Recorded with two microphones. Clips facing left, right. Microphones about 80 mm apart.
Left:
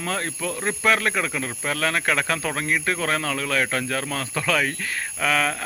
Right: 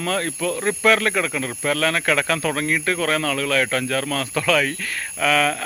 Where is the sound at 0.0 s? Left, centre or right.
Centre.